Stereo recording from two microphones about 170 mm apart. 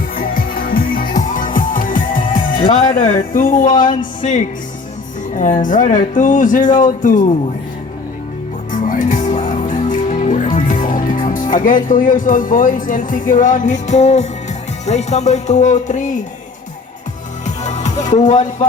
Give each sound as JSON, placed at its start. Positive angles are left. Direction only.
{"t": 0.2, "sound": "music", "side_deg": 55}
{"t": 3.3, "sound": "speech", "side_deg": 50}
{"t": 8.7, "sound": "music", "side_deg": 50}
{"t": 10.8, "sound": "speech", "side_deg": 50}
{"t": 17.4, "sound": "music", "side_deg": 45}